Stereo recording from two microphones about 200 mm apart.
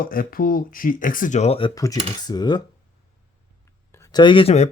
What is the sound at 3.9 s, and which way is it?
Speech, 15° left (ahead or behind).